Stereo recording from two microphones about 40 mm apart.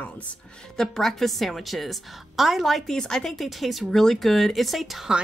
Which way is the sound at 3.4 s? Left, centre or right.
Centre.